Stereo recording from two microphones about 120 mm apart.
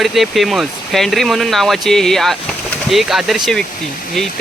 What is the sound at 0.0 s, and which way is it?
Speech, centre (ahead or behind).